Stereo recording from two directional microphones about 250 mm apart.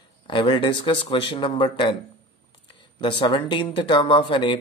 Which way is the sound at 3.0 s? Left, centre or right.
Centre.